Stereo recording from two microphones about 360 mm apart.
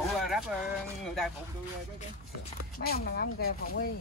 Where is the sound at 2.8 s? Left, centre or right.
Left.